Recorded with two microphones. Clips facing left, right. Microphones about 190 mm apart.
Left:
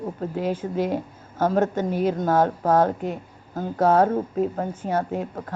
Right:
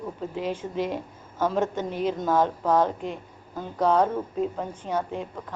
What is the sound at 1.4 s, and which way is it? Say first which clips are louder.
Speech: left 4 dB; 45° left (ahead or behind).